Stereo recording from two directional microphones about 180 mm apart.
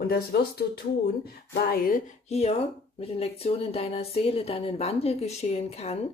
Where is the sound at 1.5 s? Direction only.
55° left (ahead or behind).